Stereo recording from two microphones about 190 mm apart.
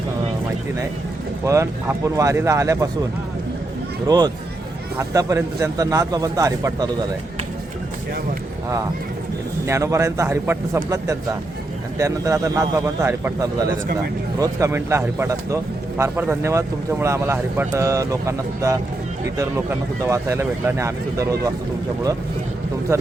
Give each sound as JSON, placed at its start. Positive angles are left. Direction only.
{"t": 1.5, "sound": "speech", "side_deg": -15}
{"t": 4.0, "sound": "speech", "side_deg": -20}
{"t": 9.6, "sound": "speech", "side_deg": -15}